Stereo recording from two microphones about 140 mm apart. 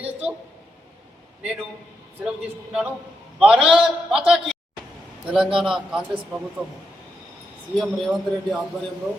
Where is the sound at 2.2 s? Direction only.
5° right (ahead or behind).